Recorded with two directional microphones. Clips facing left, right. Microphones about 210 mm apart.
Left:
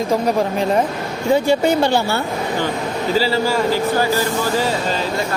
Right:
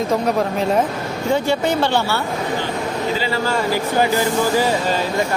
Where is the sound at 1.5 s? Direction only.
10° left (ahead or behind).